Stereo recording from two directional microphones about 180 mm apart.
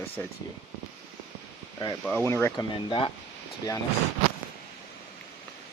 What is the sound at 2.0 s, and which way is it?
Speech, 10° left (ahead or behind).